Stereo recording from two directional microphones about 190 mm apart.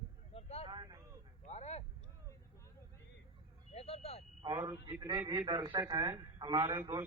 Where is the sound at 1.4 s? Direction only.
35° left (ahead or behind).